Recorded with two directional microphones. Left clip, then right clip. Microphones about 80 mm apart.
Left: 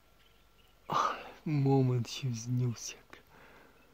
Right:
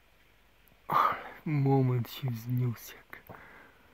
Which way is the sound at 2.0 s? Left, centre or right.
Centre.